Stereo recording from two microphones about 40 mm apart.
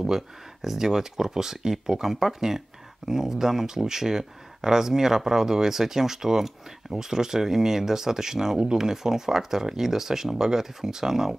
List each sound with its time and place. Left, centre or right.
0.6 s speech: centre